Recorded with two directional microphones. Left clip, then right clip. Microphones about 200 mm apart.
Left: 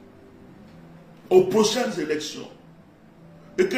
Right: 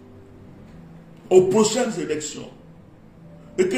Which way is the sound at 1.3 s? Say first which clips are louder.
Right 2 dB; centre (ahead or behind).